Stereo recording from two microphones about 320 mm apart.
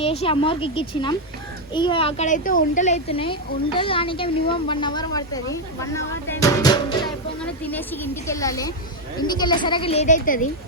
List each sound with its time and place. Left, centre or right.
0.0 s speech: centre